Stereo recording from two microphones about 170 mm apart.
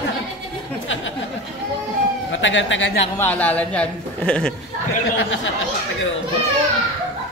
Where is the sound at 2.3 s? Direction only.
90° left.